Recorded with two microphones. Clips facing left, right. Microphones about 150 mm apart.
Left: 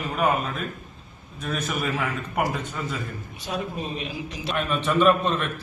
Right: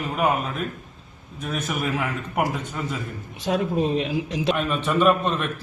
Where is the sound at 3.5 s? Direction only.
90° right.